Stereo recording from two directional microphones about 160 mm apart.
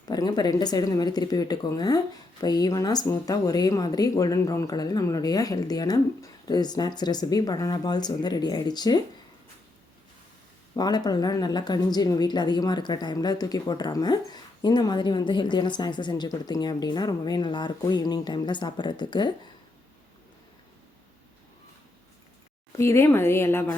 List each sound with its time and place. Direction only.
0.1 s a woman's voice: 25° left (ahead or behind)
10.8 s a woman's voice: 25° left (ahead or behind)
22.8 s speech: 15° left (ahead or behind)